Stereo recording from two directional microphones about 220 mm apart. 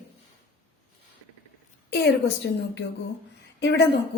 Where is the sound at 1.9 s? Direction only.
50° left (ahead or behind).